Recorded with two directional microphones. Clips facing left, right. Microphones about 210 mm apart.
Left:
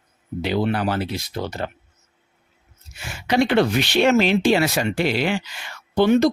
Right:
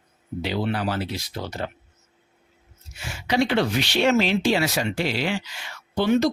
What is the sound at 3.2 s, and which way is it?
Speech, 55° left (ahead or behind).